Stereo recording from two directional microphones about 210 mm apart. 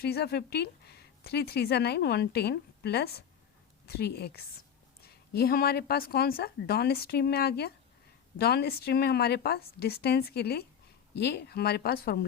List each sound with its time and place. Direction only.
0.0 s speech: 50° left (ahead or behind)